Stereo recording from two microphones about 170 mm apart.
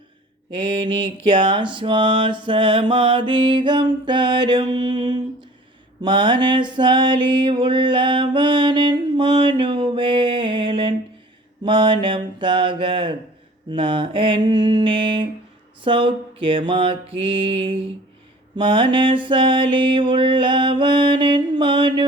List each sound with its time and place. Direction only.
0.5 s music: 30° right (ahead or behind)
15.8 s mantra: 30° right (ahead or behind)
18.5 s music: 30° right (ahead or behind)